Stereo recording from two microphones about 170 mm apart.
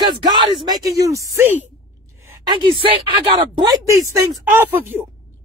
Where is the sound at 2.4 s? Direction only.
30° right (ahead or behind); by 5.0 s 10° right (ahead or behind).